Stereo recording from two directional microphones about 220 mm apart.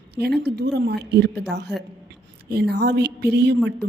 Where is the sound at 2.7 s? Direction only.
50° right (ahead or behind).